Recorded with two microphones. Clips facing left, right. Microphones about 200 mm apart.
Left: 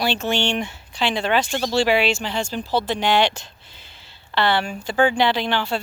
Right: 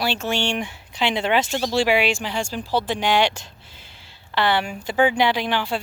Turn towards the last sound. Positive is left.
turn(degrees=-10)  # may be behind; listen again after turning